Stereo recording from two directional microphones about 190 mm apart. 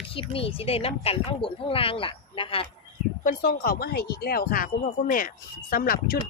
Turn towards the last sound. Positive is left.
turn(degrees=50)  # may be behind; listen again after turning